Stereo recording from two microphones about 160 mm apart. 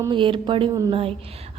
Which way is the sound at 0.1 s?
30° right (ahead or behind).